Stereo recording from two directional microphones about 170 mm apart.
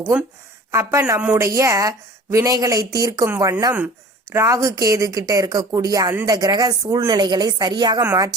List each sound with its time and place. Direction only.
0.7 s speech: 15° right (ahead or behind)
8.0 s speech: 15° right (ahead or behind)